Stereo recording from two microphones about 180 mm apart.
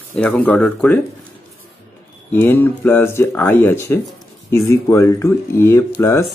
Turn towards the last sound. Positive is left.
turn(degrees=15)  # may be behind; listen again after turning